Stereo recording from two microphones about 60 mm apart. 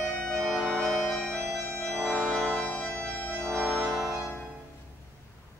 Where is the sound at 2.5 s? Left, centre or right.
Centre.